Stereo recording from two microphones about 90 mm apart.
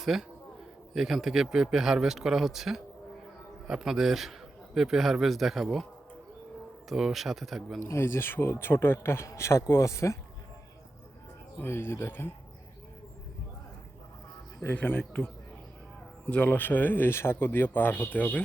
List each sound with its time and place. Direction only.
0.0 s a man's voice: 5° right (ahead or behind)
7.9 s speech: 30° left (ahead or behind)
11.6 s speech: 25° left (ahead or behind)
14.8 s speech: 15° left (ahead or behind)
16.2 s speech: 15° left (ahead or behind)